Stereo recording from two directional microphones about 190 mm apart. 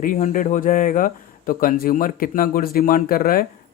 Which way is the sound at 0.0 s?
40° left (ahead or behind).